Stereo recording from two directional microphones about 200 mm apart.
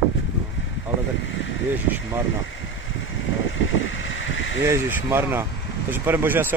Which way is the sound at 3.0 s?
75° left (ahead or behind).